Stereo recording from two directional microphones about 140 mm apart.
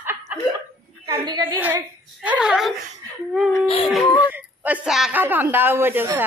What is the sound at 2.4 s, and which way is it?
Speech, 5° right (ahead or behind).